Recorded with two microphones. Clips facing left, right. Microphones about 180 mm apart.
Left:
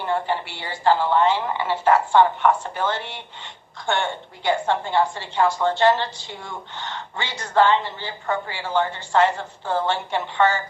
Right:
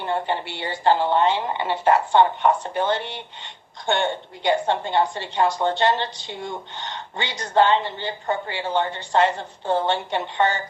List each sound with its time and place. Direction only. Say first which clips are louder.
0.0 s a woman's voice: left 1 dB; 20° right (ahead or behind)